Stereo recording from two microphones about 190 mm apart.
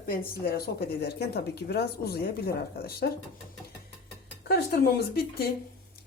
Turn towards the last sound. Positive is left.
turn(degrees=55)  # may be behind; listen again after turning